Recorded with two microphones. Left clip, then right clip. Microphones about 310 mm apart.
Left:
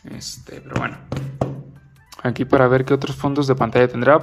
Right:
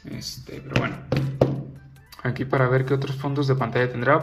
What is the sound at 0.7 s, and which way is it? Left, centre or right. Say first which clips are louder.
Speech: even; centre.